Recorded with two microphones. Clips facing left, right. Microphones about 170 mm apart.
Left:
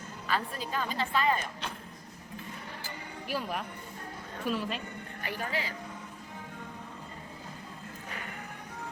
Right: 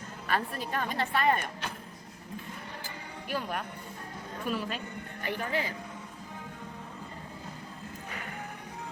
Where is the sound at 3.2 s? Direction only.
Centre (ahead or behind).